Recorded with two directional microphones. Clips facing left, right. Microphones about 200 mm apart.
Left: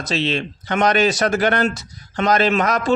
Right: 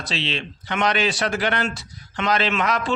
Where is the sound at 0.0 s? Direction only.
45° left (ahead or behind).